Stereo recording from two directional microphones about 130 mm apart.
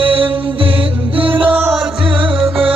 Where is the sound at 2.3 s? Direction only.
45° right (ahead or behind).